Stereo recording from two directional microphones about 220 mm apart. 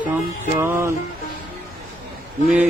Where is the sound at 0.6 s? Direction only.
10° right (ahead or behind).